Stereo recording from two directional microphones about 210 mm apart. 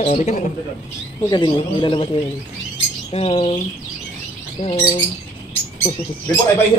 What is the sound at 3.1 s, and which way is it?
Speech, 30° left (ahead or behind).